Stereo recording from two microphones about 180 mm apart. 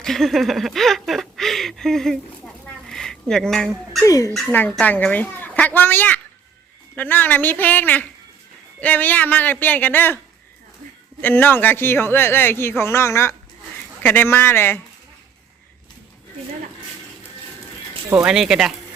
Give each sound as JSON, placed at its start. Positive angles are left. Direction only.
{"t": 0.0, "sound": "speech", "side_deg": 0}
{"t": 2.9, "sound": "a sound", "side_deg": 5}
{"t": 4.0, "sound": "speech", "side_deg": 20}
{"t": 4.7, "sound": "a man's voice", "side_deg": 10}
{"t": 11.2, "sound": "a man's voice", "side_deg": 10}
{"t": 18.3, "sound": "speech", "side_deg": -5}